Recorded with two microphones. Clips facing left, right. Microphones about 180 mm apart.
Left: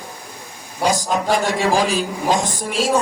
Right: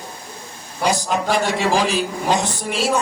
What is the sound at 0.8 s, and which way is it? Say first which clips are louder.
A man's voice: left 1 dB; 45° left (ahead or behind).